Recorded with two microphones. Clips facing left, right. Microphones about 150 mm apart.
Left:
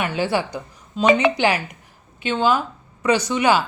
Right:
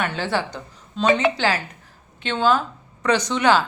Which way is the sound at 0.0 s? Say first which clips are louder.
Left 2 dB; 10° left (ahead or behind).